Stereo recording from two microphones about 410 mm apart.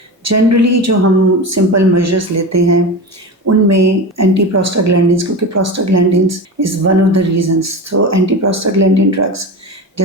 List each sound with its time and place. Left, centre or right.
0.3 s speech: right